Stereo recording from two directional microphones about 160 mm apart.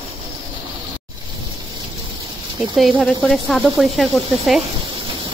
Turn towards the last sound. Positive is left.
turn(degrees=0)  # may be behind; listen again after turning